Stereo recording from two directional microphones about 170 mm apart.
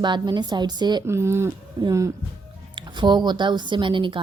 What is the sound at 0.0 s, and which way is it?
A woman's voice, 25° right (ahead or behind).